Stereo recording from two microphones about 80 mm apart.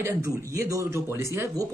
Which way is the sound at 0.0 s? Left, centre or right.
Right.